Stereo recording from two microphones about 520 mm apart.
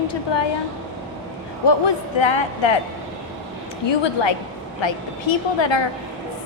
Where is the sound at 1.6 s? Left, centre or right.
Left.